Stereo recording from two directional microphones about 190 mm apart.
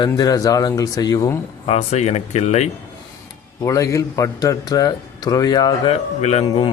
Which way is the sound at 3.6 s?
15° left (ahead or behind).